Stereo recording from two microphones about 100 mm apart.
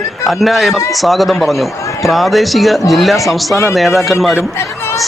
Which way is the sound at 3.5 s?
30° left (ahead or behind).